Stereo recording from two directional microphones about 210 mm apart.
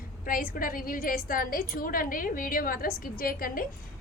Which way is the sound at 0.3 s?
40° left (ahead or behind).